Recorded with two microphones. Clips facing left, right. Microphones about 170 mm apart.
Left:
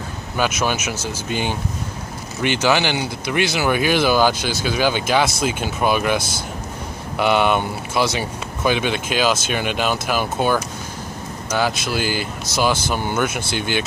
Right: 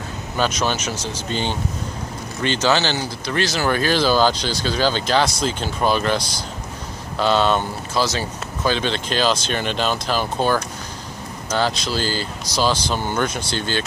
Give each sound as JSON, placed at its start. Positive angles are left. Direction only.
{"t": 0.4, "sound": "speech", "side_deg": 10}
{"t": 7.2, "sound": "speech", "side_deg": 15}
{"t": 11.9, "sound": "speech", "side_deg": 15}